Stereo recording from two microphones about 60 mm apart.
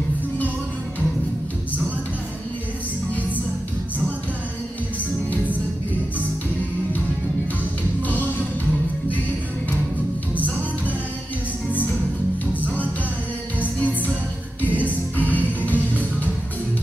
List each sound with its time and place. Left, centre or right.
14.8 s music: left